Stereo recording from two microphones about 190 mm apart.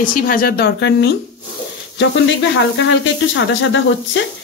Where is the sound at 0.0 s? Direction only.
45° left (ahead or behind); by 1.1 s 65° left (ahead or behind).